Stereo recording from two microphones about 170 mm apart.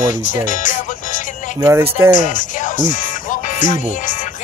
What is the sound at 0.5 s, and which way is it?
Music, 50° left (ahead or behind).